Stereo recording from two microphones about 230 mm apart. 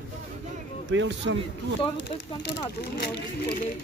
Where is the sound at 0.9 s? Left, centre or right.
Right.